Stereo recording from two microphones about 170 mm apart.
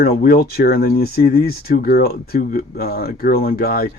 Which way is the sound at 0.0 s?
60° left (ahead or behind).